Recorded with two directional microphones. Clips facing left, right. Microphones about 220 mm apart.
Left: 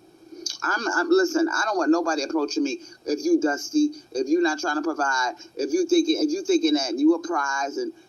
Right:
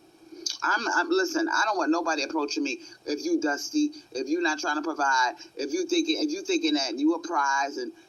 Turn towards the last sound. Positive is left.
turn(degrees=40)  # may be behind; listen again after turning